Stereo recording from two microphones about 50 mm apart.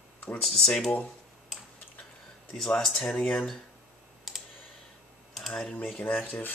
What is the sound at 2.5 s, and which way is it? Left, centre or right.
Speech, centre.